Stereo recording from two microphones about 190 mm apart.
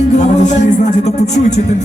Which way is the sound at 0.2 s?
35° left (ahead or behind).